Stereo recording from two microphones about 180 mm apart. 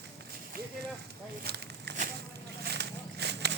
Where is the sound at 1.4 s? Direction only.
65° right (ahead or behind).